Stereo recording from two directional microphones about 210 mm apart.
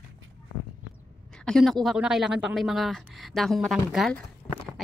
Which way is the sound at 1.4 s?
Centre (ahead or behind).